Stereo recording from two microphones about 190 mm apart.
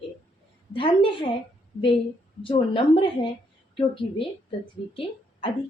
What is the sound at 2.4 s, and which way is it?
Speech, 25° left (ahead or behind).